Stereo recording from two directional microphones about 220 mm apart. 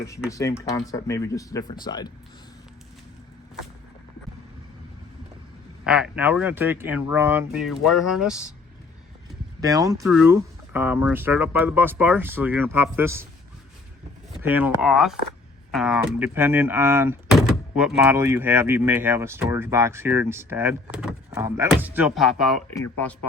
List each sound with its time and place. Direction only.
0.3 s speech: 15° left (ahead or behind)
5.8 s speech: 5° right (ahead or behind)
9.6 s speech: 15° right (ahead or behind)
10.0 s speech: 5° right (ahead or behind)
14.4 s speech: 10° right (ahead or behind)